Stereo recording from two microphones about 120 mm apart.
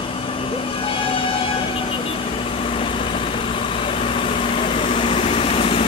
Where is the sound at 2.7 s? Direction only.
50° left (ahead or behind).